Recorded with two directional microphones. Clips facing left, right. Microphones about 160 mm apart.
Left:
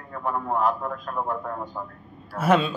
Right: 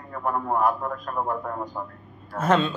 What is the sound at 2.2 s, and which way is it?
Speech, 10° left (ahead or behind).